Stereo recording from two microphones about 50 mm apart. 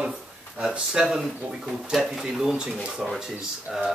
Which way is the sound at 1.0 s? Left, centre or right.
Centre.